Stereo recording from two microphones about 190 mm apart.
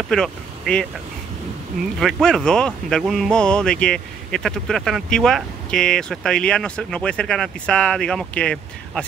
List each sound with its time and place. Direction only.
0.1 s speech: 5° left (ahead or behind)
2.0 s speech: 5° left (ahead or behind)